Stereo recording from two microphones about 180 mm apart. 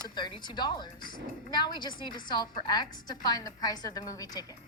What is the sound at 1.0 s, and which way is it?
Speech, 50° left (ahead or behind).